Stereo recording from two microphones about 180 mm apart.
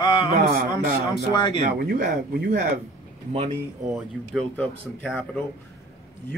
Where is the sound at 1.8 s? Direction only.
55° right (ahead or behind).